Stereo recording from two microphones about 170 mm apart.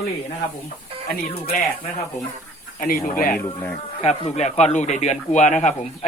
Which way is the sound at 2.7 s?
55° left (ahead or behind).